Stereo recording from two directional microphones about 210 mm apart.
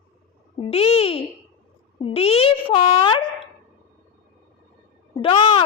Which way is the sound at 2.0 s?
25° left (ahead or behind).